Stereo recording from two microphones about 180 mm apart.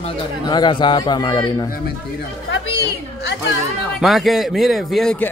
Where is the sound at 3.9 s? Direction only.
Centre (ahead or behind).